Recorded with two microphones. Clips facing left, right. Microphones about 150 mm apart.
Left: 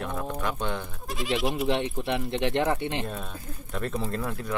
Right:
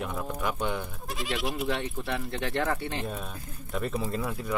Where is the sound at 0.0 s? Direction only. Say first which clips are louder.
Left 1 dB; 5° right (ahead or behind).